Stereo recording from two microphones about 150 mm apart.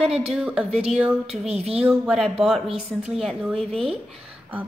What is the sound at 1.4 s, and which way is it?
Speech, 45° right (ahead or behind).